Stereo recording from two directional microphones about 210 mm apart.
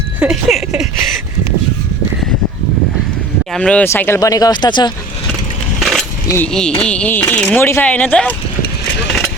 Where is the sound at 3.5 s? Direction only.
5° left (ahead or behind); by 4.9 s 20° left (ahead or behind).